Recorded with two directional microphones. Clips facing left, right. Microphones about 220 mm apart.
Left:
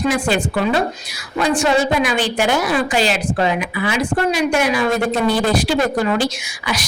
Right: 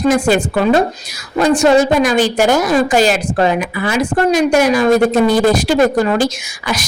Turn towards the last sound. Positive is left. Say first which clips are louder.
# right 3 dB
turn(degrees=-45)  # may be behind; listen again after turning